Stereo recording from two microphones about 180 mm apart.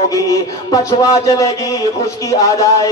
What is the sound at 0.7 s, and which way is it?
A man's voice, 20° left (ahead or behind).